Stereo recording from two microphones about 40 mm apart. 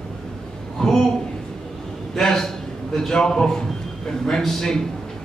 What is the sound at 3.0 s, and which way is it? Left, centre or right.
A man's voice, centre.